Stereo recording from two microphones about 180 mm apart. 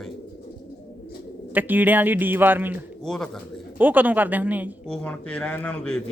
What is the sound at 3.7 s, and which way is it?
Speech, 10° right (ahead or behind).